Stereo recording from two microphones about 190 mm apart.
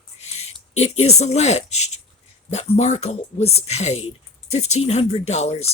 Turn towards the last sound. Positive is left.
turn(degrees=35)  # may be behind; listen again after turning